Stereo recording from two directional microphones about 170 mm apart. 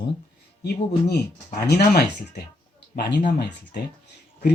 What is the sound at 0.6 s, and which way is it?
Speech, 70° left (ahead or behind).